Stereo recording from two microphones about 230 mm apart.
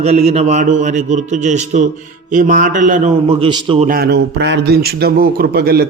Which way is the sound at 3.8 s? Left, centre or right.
Right.